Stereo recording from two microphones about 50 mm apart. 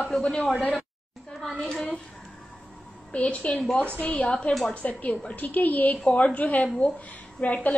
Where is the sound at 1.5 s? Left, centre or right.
Centre.